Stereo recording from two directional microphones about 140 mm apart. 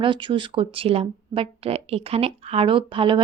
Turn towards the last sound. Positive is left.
turn(degrees=-35)  # may be behind; listen again after turning